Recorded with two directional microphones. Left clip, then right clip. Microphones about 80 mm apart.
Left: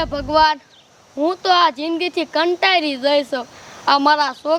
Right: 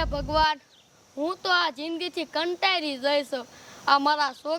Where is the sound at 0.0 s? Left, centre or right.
Right.